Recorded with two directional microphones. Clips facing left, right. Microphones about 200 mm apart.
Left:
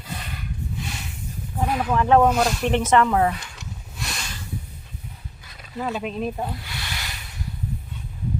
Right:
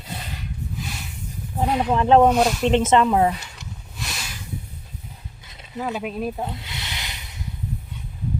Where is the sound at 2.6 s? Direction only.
20° right (ahead or behind).